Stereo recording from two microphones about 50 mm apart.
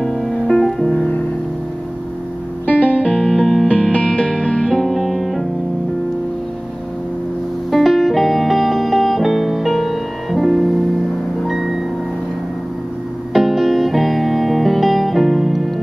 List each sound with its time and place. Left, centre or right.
0.0 s music: centre
2.6 s music: left
3.2 s music: centre
3.6 s music: left; by 5.4 s centre
7.7 s music: centre
13.3 s music: centre